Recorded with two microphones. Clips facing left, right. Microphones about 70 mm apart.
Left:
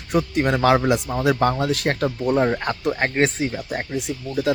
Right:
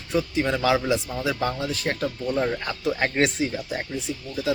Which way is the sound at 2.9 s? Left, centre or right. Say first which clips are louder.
Even; left.